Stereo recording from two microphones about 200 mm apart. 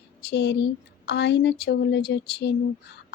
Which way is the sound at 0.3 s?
55° left (ahead or behind).